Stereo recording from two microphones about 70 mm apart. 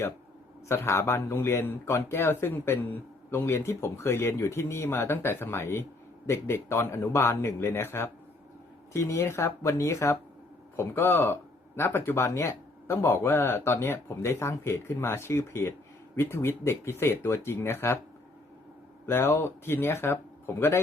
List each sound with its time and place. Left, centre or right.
0.7 s speech: left
19.0 s speech: left